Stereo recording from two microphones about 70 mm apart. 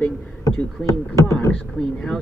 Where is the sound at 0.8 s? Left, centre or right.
Left.